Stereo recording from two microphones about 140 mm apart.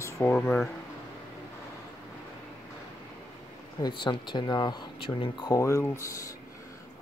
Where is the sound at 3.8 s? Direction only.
35° left (ahead or behind).